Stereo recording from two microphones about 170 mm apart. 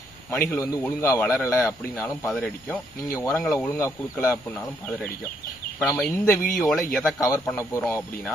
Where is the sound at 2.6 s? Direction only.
15° left (ahead or behind).